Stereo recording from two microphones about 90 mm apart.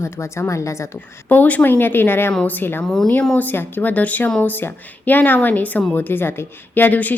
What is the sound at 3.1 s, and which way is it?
Speech, 15° left (ahead or behind).